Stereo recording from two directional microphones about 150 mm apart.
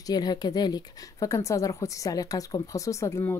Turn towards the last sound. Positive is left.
turn(degrees=15)  # may be behind; listen again after turning